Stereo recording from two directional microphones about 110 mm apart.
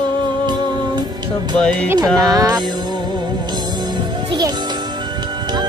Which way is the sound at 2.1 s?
35° right (ahead or behind).